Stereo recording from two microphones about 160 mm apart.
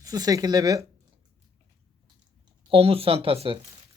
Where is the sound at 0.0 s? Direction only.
20° right (ahead or behind).